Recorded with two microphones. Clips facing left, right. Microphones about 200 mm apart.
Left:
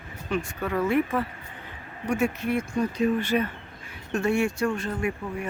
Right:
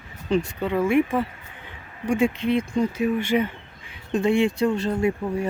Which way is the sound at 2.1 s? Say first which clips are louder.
Right 4 dB; 15° right (ahead or behind).